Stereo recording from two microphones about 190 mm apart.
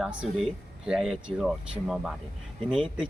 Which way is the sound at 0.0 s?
5° right (ahead or behind).